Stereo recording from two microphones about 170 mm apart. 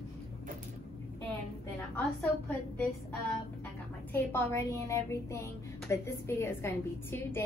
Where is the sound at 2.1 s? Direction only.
10° left (ahead or behind).